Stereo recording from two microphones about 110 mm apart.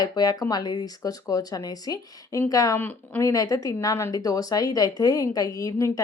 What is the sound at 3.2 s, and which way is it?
Speech, 30° left (ahead or behind).